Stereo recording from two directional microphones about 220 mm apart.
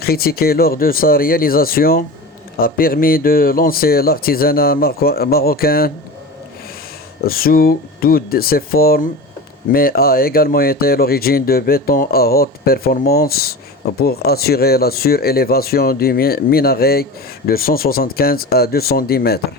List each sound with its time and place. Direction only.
0.0 s speech: 45° left (ahead or behind)
7.3 s speech: 40° left (ahead or behind)